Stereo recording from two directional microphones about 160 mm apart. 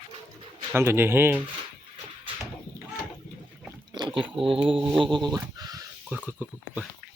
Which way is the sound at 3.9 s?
30° right (ahead or behind).